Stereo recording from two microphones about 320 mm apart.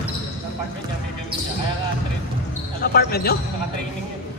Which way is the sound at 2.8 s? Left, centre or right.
Left.